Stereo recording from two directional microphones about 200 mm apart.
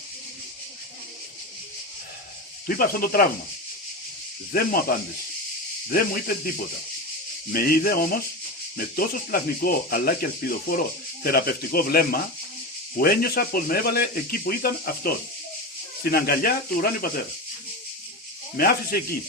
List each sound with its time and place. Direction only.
2.6 s speech: 45° left (ahead or behind)
4.5 s speech: 50° left (ahead or behind)
7.5 s speech: 50° left (ahead or behind)
18.5 s speech: 50° left (ahead or behind)